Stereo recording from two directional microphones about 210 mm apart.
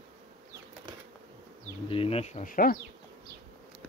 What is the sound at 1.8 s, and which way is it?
Speech, 25° left (ahead or behind).